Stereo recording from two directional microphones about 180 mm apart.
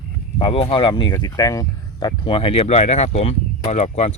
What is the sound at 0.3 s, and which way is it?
Speech, 30° left (ahead or behind).